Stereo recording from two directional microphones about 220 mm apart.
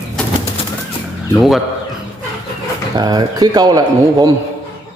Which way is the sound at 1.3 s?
Centre (ahead or behind).